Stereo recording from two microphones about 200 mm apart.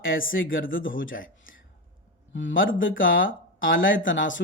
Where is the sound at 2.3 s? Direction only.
70° left (ahead or behind).